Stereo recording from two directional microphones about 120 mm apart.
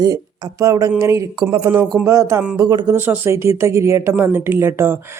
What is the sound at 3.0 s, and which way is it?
A woman's voice, 20° right (ahead or behind).